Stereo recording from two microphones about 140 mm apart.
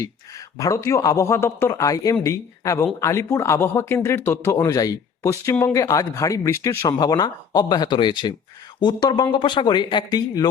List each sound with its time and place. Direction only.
0.6 s speech: 20° left (ahead or behind)